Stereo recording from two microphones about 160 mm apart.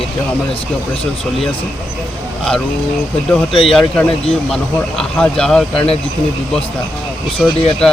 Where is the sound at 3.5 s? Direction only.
35° left (ahead or behind).